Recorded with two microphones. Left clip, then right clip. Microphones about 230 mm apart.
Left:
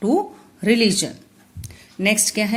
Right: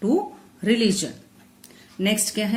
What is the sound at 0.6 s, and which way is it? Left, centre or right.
A woman's voice, left.